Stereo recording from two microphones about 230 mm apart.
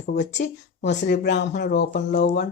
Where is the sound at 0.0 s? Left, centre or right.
Left.